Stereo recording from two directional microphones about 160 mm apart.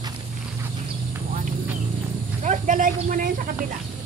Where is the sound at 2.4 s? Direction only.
50° right (ahead or behind).